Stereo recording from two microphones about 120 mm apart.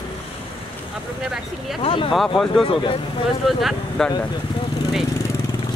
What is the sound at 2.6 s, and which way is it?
Speech, 50° left (ahead or behind).